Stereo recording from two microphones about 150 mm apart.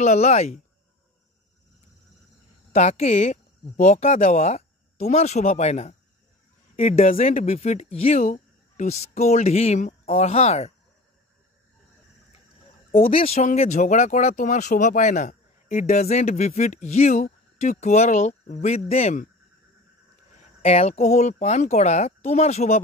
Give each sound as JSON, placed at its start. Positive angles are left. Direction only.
{"t": 0.0, "sound": "speech", "side_deg": 50}
{"t": 2.7, "sound": "speech", "side_deg": 45}
{"t": 13.0, "sound": "speech", "side_deg": 40}
{"t": 20.3, "sound": "speech", "side_deg": 45}